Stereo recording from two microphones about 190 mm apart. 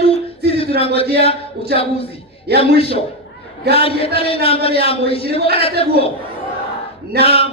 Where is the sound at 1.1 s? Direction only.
30° left (ahead or behind).